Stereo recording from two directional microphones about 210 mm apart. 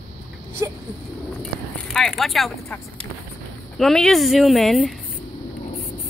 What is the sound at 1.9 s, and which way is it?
Speech, centre (ahead or behind).